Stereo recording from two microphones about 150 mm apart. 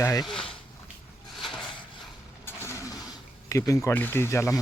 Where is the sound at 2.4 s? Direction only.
20° left (ahead or behind).